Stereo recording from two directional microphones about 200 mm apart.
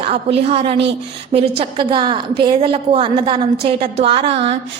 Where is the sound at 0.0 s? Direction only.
30° right (ahead or behind).